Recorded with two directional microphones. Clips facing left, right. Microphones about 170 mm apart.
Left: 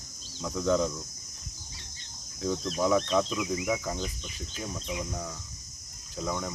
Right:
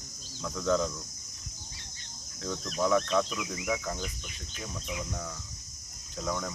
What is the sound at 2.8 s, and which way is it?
Speech, 10° left (ahead or behind).